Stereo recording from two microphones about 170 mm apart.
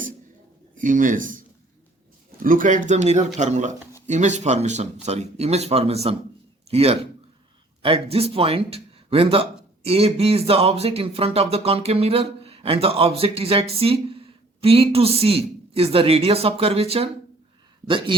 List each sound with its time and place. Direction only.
0.8 s speech: 50° right (ahead or behind); by 18.1 s 30° right (ahead or behind)